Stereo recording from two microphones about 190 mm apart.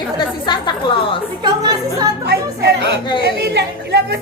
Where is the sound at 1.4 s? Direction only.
20° right (ahead or behind).